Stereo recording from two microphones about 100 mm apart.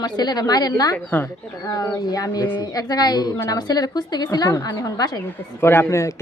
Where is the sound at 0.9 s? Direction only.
20° left (ahead or behind).